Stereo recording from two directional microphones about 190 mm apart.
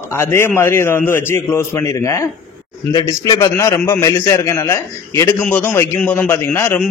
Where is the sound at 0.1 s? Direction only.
15° left (ahead or behind).